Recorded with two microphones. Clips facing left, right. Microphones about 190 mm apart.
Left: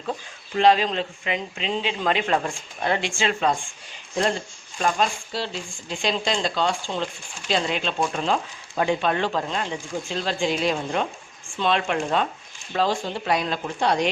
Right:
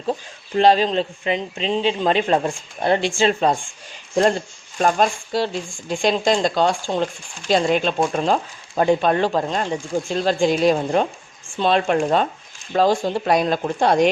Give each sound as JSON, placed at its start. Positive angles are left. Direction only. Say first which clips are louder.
{"t": 0.1, "sound": "speech", "louder": "right 6 dB", "side_deg": -35}
{"t": 4.8, "sound": "speech", "louder": "right 5 dB", "side_deg": -45}